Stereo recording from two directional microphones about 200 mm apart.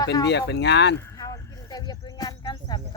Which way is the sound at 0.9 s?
15° left (ahead or behind).